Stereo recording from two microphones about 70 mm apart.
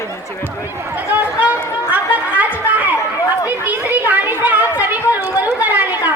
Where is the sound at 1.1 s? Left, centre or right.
Right.